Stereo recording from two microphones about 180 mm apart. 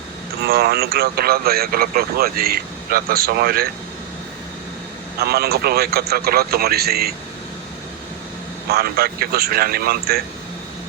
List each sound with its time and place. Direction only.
0.4 s speech: 60° right (ahead or behind)
5.2 s speech: 60° right (ahead or behind)
8.7 s speech: 60° right (ahead or behind)